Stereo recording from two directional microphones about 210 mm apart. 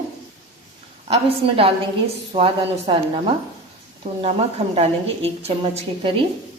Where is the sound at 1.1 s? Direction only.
25° right (ahead or behind).